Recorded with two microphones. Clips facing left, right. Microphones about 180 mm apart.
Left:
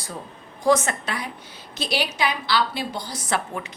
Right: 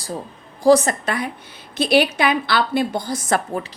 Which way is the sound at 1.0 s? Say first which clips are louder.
Right 6 dB; 50° right (ahead or behind).